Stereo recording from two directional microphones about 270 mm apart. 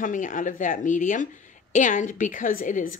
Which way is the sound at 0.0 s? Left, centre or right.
Left.